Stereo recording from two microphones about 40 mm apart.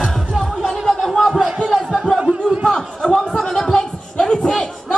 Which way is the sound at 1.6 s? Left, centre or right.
Centre.